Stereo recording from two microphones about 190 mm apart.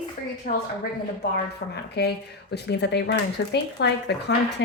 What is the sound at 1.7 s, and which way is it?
Speech, 60° left (ahead or behind).